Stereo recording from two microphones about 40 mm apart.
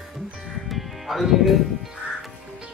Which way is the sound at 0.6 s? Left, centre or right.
Centre.